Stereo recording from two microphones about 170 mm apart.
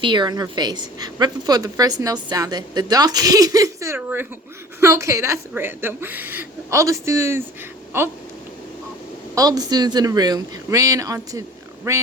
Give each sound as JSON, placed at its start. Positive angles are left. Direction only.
{"t": 0.0, "sound": "a woman's voice", "side_deg": -25}
{"t": 9.3, "sound": "a woman's voice", "side_deg": -20}